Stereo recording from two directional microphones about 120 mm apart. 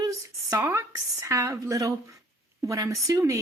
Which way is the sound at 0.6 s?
25° right (ahead or behind).